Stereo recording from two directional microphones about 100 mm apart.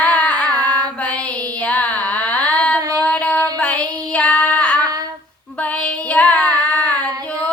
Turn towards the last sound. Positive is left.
turn(degrees=10)  # may be behind; listen again after turning